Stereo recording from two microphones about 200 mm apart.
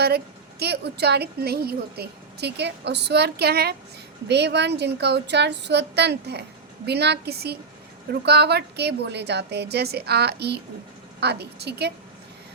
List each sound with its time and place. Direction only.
0.6 s a woman's voice: 55° right (ahead or behind)